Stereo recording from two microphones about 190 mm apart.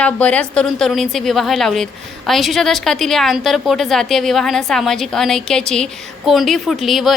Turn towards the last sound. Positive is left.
turn(degrees=0)  # may be behind; listen again after turning